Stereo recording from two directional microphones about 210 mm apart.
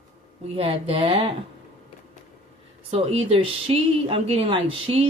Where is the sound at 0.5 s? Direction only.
25° right (ahead or behind).